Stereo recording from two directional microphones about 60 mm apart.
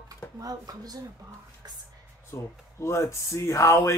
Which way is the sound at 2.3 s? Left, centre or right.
Left.